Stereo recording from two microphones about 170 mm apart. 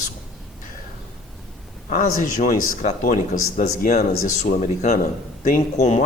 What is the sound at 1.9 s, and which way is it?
Speech, 50° left (ahead or behind).